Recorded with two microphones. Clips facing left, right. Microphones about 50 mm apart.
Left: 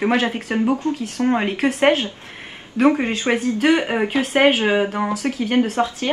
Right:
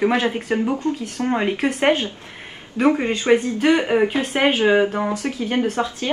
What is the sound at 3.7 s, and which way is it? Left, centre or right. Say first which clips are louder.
Speech: right 3 dB; left.